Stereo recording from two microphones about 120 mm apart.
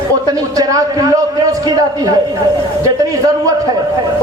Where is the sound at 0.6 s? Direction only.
30° right (ahead or behind).